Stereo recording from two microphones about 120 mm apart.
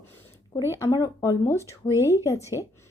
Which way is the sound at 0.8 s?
30° left (ahead or behind).